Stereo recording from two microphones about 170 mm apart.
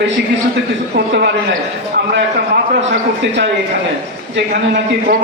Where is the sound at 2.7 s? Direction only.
90° right.